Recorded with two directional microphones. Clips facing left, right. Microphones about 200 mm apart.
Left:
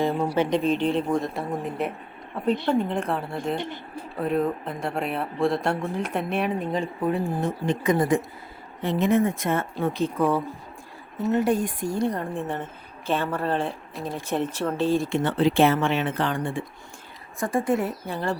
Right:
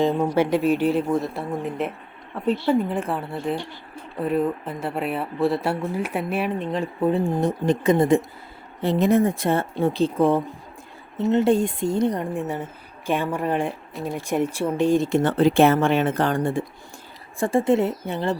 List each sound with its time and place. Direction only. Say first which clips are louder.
0.0 s speech: right 3 dB; 20° right (ahead or behind)
0.3 s speech: right 2 dB; 5° right (ahead or behind)
7.0 s a woman's voice: right 6 dB; 25° right (ahead or behind)
15.1 s speech: right 4 dB; 45° right (ahead or behind)
17.4 s a woman's voice: right 4 dB; 25° right (ahead or behind)